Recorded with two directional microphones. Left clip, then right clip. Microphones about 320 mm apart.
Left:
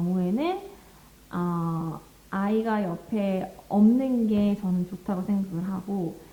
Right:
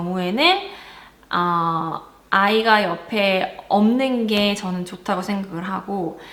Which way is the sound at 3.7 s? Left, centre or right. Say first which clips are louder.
Right 5 dB; right.